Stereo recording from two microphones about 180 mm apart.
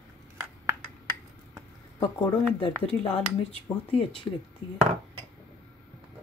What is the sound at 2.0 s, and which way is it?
Speech, 30° left (ahead or behind).